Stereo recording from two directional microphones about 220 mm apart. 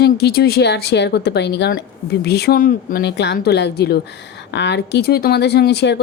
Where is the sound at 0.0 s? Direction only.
45° left (ahead or behind).